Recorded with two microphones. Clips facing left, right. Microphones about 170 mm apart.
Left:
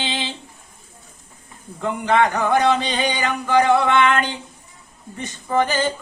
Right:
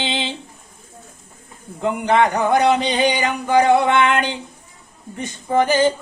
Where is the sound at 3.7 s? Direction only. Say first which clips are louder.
Right 1 dB; 20° right (ahead or behind).